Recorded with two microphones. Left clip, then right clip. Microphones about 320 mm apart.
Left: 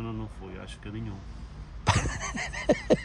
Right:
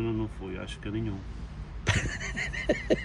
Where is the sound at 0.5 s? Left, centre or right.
Left.